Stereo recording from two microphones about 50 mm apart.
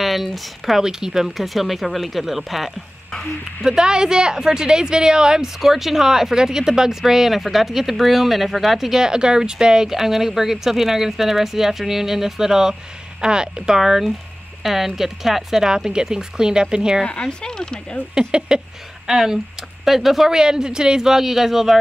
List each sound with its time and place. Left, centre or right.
0.0 s speech: centre
3.6 s speech: centre
17.0 s speech: centre
18.2 s speech: centre